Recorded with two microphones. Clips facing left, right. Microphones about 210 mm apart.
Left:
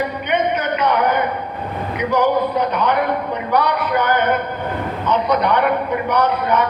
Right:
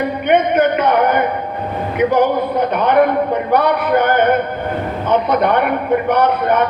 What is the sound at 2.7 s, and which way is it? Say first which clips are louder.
A man's voice: right 5 dB; 55° right (ahead or behind).